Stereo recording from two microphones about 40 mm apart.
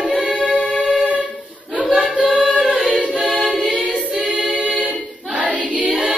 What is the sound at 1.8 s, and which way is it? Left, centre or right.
Singing, right.